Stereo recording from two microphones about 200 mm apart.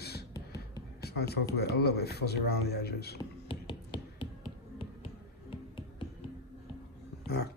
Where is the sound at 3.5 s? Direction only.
25° left (ahead or behind).